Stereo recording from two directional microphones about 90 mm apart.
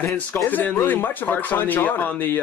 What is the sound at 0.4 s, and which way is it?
Speech, 20° left (ahead or behind).